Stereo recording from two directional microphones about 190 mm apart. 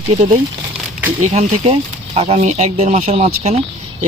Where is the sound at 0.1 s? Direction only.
30° right (ahead or behind).